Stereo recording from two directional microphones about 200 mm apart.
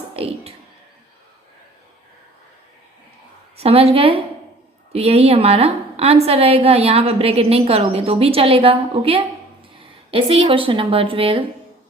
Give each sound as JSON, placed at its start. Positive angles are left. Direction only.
{"t": 0.2, "sound": "a woman's voice", "side_deg": -30}
{"t": 3.6, "sound": "a woman's voice", "side_deg": -30}